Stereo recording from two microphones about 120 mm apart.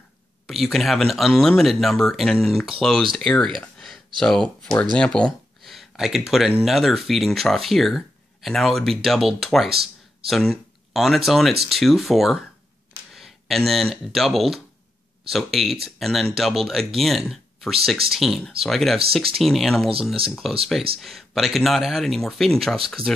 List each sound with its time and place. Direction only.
0.5 s speech: centre (ahead or behind)
23.0 s speech: 50° right (ahead or behind)